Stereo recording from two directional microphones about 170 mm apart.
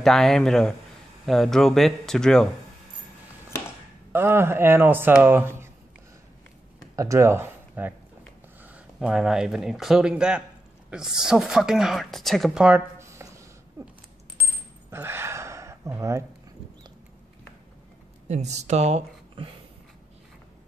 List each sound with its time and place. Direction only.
0.0 s speech: centre (ahead or behind)
4.1 s speech: 15° right (ahead or behind)
7.0 s speech: 15° right (ahead or behind)
14.9 s a sound: 15° right (ahead or behind)
18.3 s speech: 40° right (ahead or behind)